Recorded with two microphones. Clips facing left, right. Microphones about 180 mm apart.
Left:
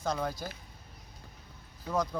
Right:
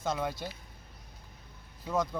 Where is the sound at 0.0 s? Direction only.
5° right (ahead or behind).